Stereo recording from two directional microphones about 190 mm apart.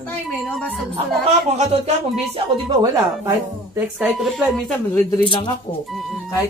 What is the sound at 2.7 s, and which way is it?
Speech, 20° right (ahead or behind).